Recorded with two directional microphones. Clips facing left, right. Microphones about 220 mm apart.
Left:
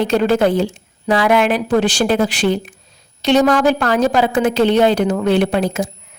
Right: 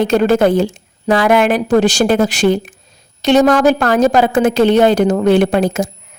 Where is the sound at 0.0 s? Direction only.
45° right (ahead or behind).